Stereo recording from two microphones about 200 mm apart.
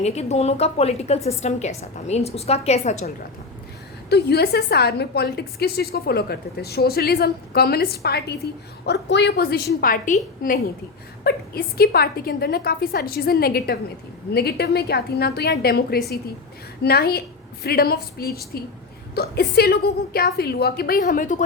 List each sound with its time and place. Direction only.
0.0 s a woman's voice: 35° left (ahead or behind)
4.1 s a woman's voice: 55° left (ahead or behind)
11.2 s a woman's voice: 50° left (ahead or behind)